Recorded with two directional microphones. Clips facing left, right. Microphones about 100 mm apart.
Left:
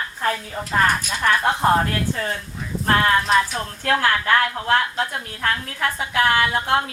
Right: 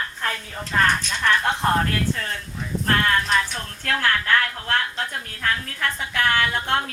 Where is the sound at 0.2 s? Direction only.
10° left (ahead or behind).